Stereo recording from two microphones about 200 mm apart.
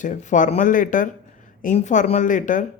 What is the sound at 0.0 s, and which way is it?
Speech, 40° left (ahead or behind).